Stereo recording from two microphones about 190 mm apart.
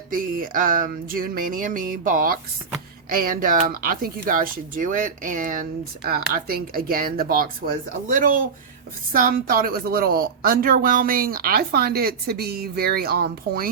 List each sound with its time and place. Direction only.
0.1 s speech: 45° right (ahead or behind)